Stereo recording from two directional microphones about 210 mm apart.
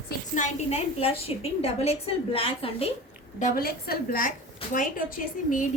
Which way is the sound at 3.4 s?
45° left (ahead or behind).